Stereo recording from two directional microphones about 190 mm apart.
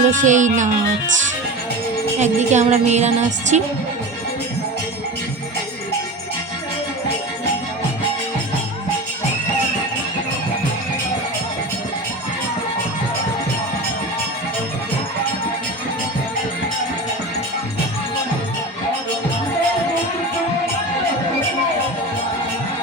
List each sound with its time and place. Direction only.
0.0 s music: 40° right (ahead or behind)
2.1 s music: 35° right (ahead or behind)